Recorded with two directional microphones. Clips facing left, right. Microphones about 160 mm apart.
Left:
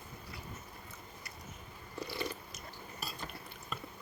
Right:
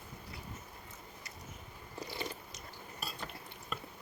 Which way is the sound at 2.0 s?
20° right (ahead or behind).